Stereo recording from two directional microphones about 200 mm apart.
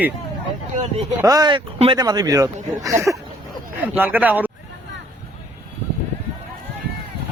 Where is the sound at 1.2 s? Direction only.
20° right (ahead or behind).